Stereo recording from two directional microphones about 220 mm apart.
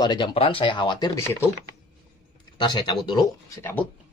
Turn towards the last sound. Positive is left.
turn(degrees=10)  # may be behind; listen again after turning